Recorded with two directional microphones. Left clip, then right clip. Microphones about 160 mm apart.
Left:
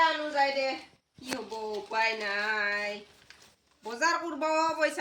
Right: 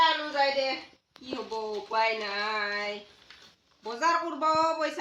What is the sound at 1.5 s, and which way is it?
Speech, 15° left (ahead or behind).